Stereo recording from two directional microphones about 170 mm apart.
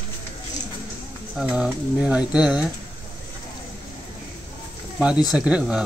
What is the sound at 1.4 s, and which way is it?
Speech, 5° right (ahead or behind).